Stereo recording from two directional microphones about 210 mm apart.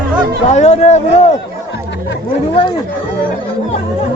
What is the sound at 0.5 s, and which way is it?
Speech, 30° left (ahead or behind).